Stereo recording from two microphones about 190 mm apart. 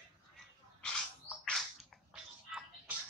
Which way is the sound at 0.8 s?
5° left (ahead or behind).